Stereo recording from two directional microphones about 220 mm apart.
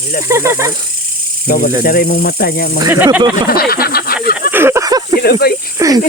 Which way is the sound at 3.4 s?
45° left (ahead or behind).